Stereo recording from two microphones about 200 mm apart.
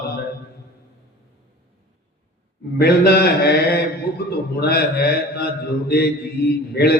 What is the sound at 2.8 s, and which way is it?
A man's voice, 55° left (ahead or behind).